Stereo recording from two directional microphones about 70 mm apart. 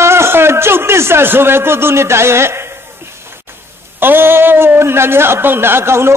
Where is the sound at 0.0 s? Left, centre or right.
Right.